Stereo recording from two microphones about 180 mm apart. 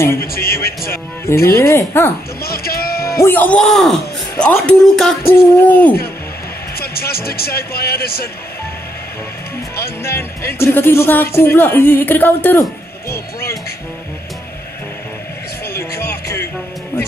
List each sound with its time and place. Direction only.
0.2 s speech: 55° left (ahead or behind)
1.2 s speech: 15° left (ahead or behind)
2.4 s a sound: 55° left (ahead or behind)
3.2 s a man's voice: 10° left (ahead or behind)
6.8 s speech: 60° left (ahead or behind)
10.0 s speech: 15° left (ahead or behind)